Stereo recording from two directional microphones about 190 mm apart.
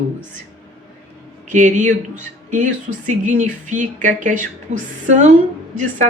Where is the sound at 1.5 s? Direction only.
40° right (ahead or behind).